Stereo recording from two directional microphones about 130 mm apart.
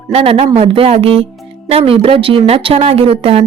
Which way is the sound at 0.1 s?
50° right (ahead or behind).